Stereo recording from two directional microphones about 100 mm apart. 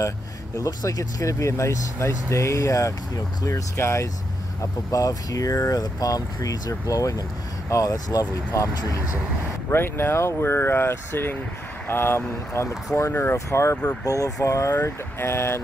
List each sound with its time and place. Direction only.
0.6 s speech: 35° left (ahead or behind)
9.7 s speech: 20° left (ahead or behind)